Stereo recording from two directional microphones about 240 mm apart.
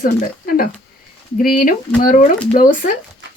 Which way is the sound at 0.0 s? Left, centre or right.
Left.